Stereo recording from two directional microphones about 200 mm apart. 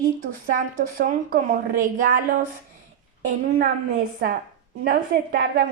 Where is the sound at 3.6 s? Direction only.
40° right (ahead or behind).